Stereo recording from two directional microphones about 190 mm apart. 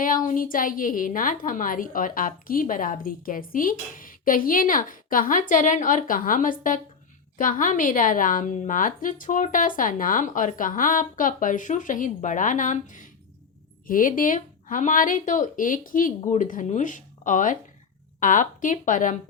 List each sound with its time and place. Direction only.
0.0 s a woman's voice: 45° left (ahead or behind)